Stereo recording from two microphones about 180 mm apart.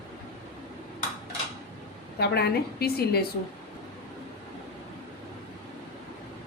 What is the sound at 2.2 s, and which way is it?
Speech, 65° left (ahead or behind).